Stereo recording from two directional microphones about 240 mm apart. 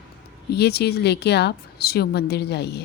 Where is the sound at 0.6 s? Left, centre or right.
Left.